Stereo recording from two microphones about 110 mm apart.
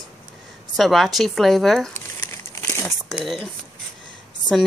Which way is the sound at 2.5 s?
25° left (ahead or behind).